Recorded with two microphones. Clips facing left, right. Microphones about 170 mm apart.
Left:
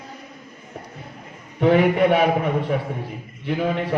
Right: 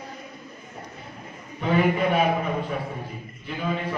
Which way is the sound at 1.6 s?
70° left (ahead or behind).